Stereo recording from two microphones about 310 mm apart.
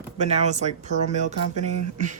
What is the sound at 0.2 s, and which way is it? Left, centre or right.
Speech, right.